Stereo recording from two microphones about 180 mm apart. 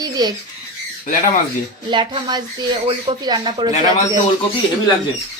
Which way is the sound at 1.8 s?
25° right (ahead or behind).